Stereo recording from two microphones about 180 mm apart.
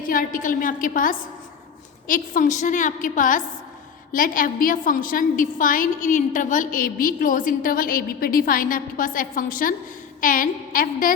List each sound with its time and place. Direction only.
0.0 s a woman's voice: 50° left (ahead or behind)